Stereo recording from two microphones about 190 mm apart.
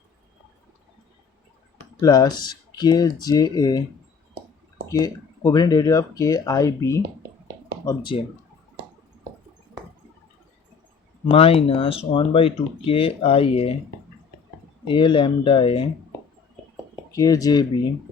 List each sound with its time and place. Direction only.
2.0 s speech: 20° left (ahead or behind)
4.9 s speech: 20° left (ahead or behind)
11.3 s speech: 30° left (ahead or behind)
14.8 s speech: 25° left (ahead or behind)
17.1 s speech: 20° left (ahead or behind)